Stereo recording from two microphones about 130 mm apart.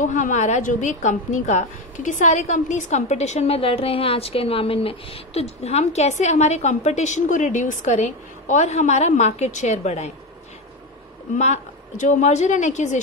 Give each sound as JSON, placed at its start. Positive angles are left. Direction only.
{"t": 0.0, "sound": "a woman's voice", "side_deg": 75}
{"t": 11.3, "sound": "a woman's voice", "side_deg": 60}